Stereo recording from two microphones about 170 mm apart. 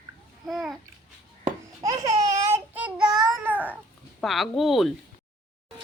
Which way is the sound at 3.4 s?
10° right (ahead or behind).